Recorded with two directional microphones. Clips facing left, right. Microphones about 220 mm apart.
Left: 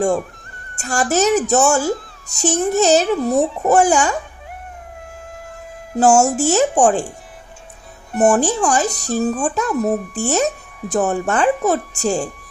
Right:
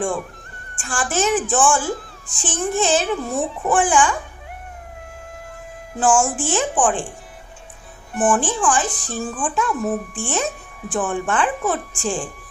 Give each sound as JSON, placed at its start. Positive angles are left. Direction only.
{"t": 0.8, "sound": "speech", "side_deg": 40}
{"t": 6.0, "sound": "speech", "side_deg": 40}
{"t": 8.1, "sound": "speech", "side_deg": 40}